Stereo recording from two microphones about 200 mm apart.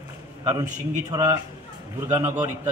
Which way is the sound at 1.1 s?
15° right (ahead or behind).